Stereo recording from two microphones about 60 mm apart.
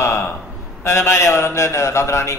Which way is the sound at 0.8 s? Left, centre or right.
Left.